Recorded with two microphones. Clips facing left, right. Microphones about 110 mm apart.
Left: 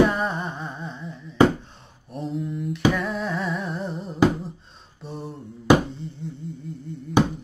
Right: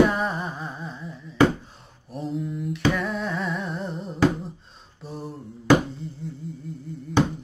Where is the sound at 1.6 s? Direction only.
Centre (ahead or behind).